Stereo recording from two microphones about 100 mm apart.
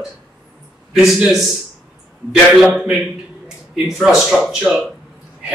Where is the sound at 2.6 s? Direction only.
Centre (ahead or behind).